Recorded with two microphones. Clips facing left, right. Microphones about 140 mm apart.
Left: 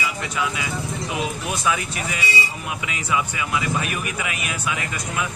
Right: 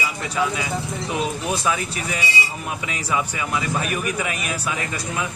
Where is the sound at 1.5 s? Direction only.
30° right (ahead or behind).